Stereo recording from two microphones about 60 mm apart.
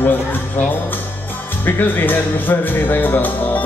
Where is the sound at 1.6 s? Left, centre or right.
Left.